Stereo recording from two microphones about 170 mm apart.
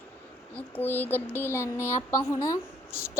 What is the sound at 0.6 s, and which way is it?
Speech, 10° left (ahead or behind).